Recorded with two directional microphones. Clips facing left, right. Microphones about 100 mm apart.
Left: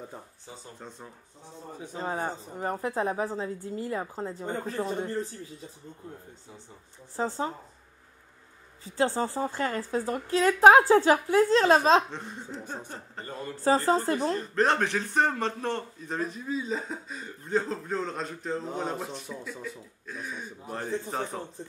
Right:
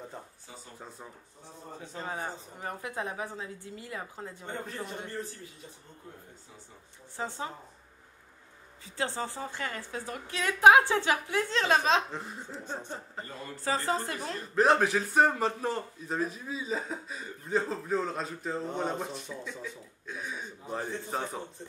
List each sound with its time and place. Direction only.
0.7 s a man's voice: 5° right (ahead or behind)
2.0 s a woman's voice: 35° left (ahead or behind)
7.2 s a woman's voice: 35° left (ahead or behind)
8.8 s a woman's voice: 35° left (ahead or behind)
12.1 s a man's voice: centre (ahead or behind)
13.2 s a woman's voice: 35° left (ahead or behind)
14.5 s a man's voice: 5° right (ahead or behind)